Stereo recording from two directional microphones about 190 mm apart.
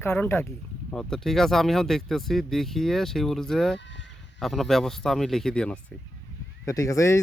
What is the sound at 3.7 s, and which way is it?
Fowl, 70° left (ahead or behind).